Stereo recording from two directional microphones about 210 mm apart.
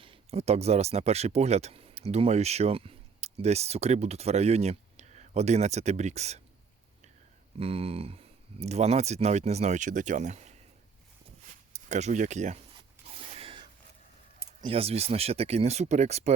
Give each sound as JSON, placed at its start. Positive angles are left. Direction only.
{"t": 0.0, "sound": "speech", "side_deg": -25}
{"t": 7.6, "sound": "speech", "side_deg": -25}
{"t": 11.7, "sound": "speech", "side_deg": -35}
{"t": 13.1, "sound": "a sound", "side_deg": -30}
{"t": 14.6, "sound": "speech", "side_deg": -25}